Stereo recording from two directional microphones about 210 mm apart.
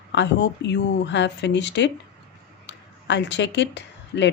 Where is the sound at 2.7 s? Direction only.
55° left (ahead or behind).